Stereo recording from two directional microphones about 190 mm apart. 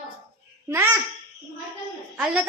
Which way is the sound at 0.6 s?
15° right (ahead or behind).